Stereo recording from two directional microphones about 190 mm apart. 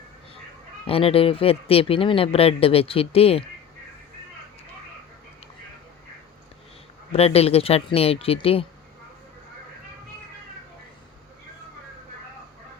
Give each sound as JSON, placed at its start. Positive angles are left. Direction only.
{"t": 0.9, "sound": "speech", "side_deg": 30}
{"t": 7.1, "sound": "speech", "side_deg": 30}